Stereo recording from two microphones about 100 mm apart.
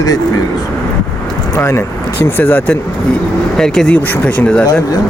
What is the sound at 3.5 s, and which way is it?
Speech, 5° left (ahead or behind).